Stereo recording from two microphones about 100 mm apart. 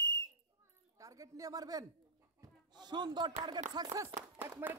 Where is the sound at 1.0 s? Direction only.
35° right (ahead or behind).